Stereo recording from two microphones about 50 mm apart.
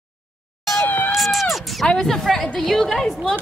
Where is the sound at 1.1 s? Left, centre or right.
Centre.